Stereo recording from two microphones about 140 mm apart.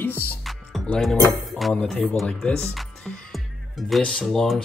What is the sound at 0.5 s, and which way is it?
Music, 5° left (ahead or behind).